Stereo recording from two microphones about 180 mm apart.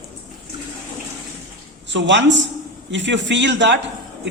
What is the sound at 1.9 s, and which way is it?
A man's voice, 85° right.